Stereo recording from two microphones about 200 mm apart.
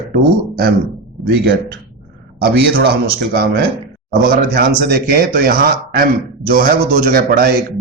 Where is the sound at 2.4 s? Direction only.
50° right (ahead or behind).